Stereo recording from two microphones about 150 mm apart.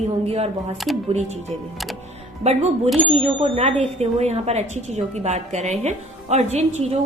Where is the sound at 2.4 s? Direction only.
45° right (ahead or behind).